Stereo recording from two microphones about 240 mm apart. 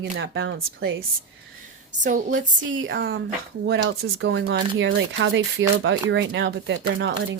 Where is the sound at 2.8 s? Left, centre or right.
Right.